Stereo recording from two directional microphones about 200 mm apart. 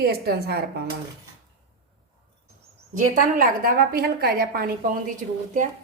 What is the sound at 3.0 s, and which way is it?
A woman's voice, 45° right (ahead or behind).